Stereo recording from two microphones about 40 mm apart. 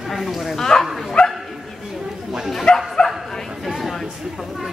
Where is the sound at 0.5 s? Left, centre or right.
Centre.